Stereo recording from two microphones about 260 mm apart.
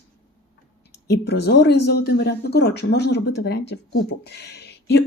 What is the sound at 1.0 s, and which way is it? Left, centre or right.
A woman's voice, left.